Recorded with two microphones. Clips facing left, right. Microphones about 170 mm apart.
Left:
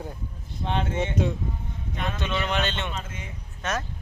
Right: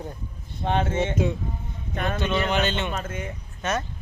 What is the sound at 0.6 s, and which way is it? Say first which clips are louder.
Speech: right 4 dB; 50° right (ahead or behind).